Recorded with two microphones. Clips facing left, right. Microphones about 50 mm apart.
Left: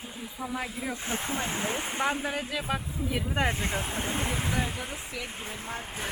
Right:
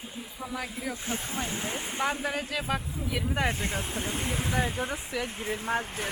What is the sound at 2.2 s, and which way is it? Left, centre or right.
Speech, centre.